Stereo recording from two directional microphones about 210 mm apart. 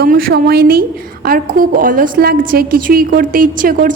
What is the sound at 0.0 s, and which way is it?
A woman's voice, 45° right (ahead or behind).